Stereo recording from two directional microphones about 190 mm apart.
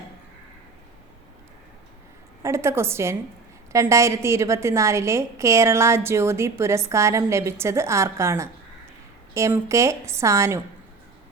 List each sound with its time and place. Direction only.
2.4 s a woman's voice: 15° right (ahead or behind)